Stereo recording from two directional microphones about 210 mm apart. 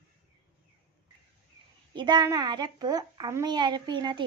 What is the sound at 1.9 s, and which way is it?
A child's voice, 20° right (ahead or behind).